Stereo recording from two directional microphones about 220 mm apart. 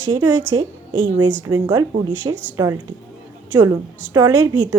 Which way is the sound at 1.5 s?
20° right (ahead or behind).